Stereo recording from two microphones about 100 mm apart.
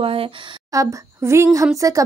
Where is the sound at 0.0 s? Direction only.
65° right (ahead or behind).